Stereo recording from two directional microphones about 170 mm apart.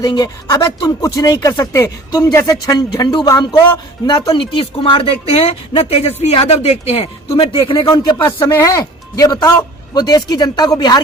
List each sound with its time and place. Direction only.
0.0 s speech: 25° left (ahead or behind)